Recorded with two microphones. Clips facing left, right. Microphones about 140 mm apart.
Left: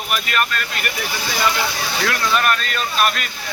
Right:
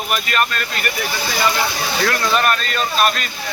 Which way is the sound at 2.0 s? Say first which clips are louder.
Right 2 dB; centre (ahead or behind).